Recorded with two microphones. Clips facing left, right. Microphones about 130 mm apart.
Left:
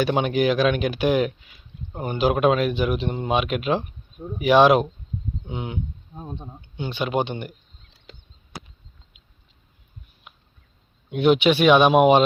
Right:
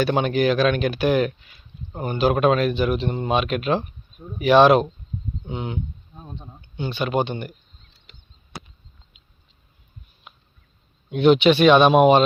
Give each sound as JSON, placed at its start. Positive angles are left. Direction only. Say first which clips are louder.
{"t": 0.0, "sound": "speech", "louder": "right 1 dB", "side_deg": 15}
{"t": 6.1, "sound": "speech", "louder": "left 5 dB", "side_deg": 35}
{"t": 6.5, "sound": "speech", "louder": "right 5 dB", "side_deg": 15}
{"t": 10.3, "sound": "a sound", "louder": "right 3 dB", "side_deg": 5}
{"t": 11.1, "sound": "speech", "louder": "right 2 dB", "side_deg": 10}